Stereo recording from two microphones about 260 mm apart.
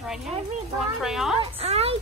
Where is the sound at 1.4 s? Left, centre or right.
Right.